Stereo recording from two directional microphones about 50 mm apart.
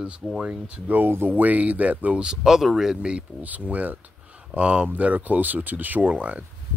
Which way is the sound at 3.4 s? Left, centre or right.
Right.